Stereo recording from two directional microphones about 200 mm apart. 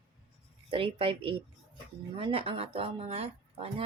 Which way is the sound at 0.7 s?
25° right (ahead or behind).